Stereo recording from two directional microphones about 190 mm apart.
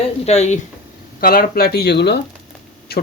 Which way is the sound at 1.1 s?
50° left (ahead or behind).